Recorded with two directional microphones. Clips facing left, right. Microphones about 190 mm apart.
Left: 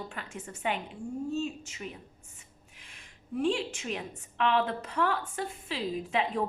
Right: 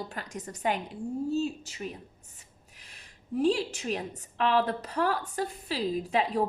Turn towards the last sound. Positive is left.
turn(degrees=-35)  # may be behind; listen again after turning